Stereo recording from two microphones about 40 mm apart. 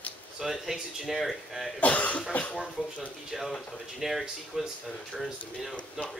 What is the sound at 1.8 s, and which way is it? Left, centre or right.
Cough, left.